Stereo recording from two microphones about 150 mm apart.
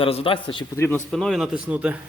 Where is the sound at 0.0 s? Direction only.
40° left (ahead or behind).